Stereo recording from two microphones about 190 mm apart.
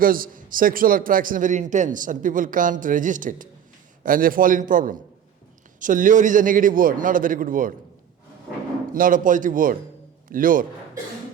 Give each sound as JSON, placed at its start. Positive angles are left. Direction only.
{"t": 0.0, "sound": "a man's voice", "side_deg": -50}
{"t": 8.9, "sound": "a man's voice", "side_deg": -45}